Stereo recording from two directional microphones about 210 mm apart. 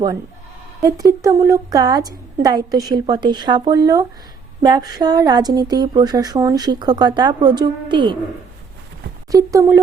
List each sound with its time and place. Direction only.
0.8 s a woman's voice: 15° right (ahead or behind)
9.3 s a woman's voice: 15° right (ahead or behind)